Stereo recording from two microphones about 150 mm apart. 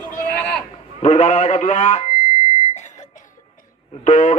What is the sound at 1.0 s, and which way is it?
A man's voice, 50° left (ahead or behind).